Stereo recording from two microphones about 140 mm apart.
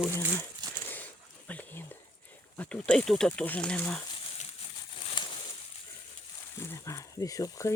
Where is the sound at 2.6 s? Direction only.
10° left (ahead or behind).